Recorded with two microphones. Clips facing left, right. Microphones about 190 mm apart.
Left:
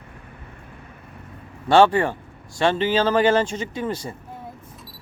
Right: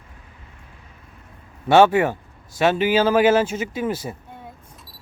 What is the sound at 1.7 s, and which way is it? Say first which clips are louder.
Speech: right 1 dB; 10° right (ahead or behind).